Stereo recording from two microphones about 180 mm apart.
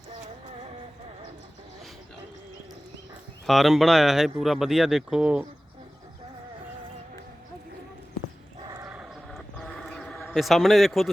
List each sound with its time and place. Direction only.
3.4 s speech: centre (ahead or behind)
8.6 s dog: 20° right (ahead or behind)
8.9 s a sound: centre (ahead or behind)